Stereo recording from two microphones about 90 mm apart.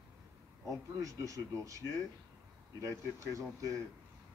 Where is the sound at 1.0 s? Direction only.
40° right (ahead or behind).